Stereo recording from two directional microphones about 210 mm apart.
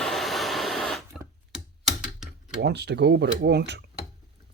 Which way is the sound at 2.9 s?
55° right (ahead or behind).